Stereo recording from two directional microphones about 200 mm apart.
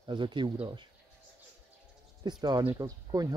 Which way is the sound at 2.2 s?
20° right (ahead or behind).